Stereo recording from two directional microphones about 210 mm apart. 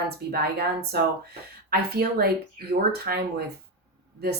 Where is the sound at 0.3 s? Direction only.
50° right (ahead or behind).